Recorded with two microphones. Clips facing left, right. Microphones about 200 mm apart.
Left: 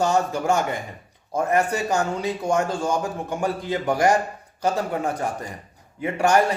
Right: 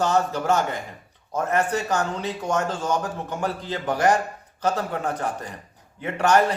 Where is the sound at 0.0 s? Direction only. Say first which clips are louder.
Left 1 dB; 10° left (ahead or behind).